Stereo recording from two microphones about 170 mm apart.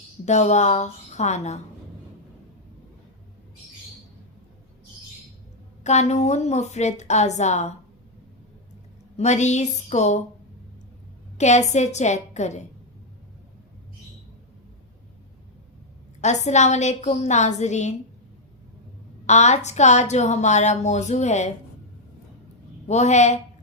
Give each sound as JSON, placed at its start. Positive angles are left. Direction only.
{"t": 0.3, "sound": "a woman's voice", "side_deg": 40}
{"t": 5.8, "sound": "a woman's voice", "side_deg": 40}
{"t": 9.1, "sound": "a woman's voice", "side_deg": 40}
{"t": 11.3, "sound": "a woman's voice", "side_deg": 40}
{"t": 16.2, "sound": "a woman's voice", "side_deg": 40}
{"t": 19.2, "sound": "a woman's voice", "side_deg": 40}
{"t": 22.9, "sound": "a woman's voice", "side_deg": 40}